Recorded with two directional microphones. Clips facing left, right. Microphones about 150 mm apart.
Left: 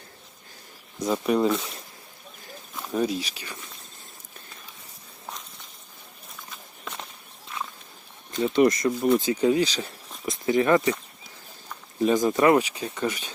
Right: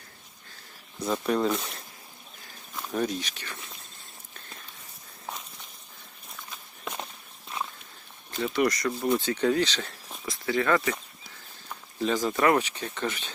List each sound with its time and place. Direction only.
1.0 s speech: 10° left (ahead or behind)
2.7 s speech: 5° left (ahead or behind)
8.5 s speech: 25° left (ahead or behind)
12.0 s speech: 20° left (ahead or behind)